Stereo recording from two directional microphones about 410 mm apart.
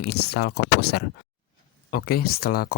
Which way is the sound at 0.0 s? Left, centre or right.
Left.